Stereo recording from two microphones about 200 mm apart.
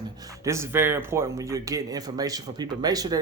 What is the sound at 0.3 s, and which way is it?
Speech, 15° right (ahead or behind).